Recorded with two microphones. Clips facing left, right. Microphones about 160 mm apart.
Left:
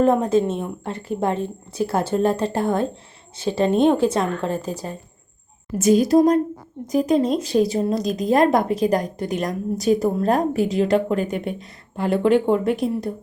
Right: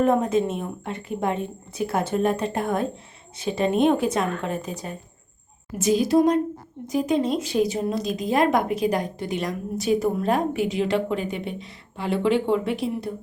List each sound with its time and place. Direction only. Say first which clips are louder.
0.0 s speech: left 3 dB; 30° left (ahead or behind)
5.8 s a woman's voice: left 4 dB; 45° left (ahead or behind)